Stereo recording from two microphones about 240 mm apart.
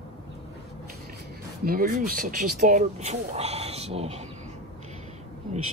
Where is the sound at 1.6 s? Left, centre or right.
Right.